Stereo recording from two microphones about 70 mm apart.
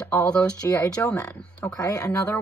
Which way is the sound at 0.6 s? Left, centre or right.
Left.